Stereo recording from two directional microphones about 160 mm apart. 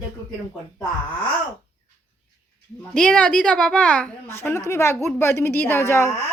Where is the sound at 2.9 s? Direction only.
5° left (ahead or behind).